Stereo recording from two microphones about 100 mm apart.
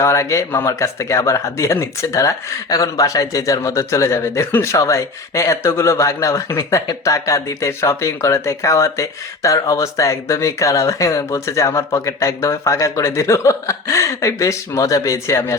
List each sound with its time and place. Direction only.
0.0 s speech: 30° left (ahead or behind)